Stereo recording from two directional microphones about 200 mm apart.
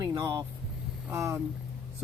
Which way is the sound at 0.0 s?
20° right (ahead or behind).